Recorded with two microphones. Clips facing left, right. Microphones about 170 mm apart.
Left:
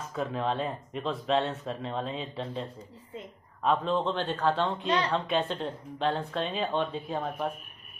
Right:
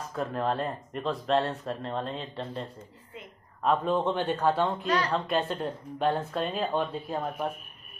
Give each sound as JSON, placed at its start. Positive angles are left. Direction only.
{"t": 0.1, "sound": "speech", "side_deg": 0}
{"t": 3.6, "sound": "a man's voice", "side_deg": -10}
{"t": 4.8, "sound": "a woman's voice", "side_deg": 25}
{"t": 5.1, "sound": "speech", "side_deg": 0}